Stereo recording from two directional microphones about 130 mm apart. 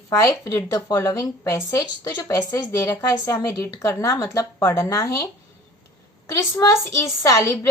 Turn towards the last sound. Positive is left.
turn(degrees=20)  # may be behind; listen again after turning